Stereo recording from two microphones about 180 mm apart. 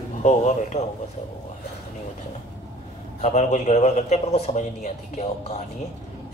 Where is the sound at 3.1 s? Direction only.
40° left (ahead or behind).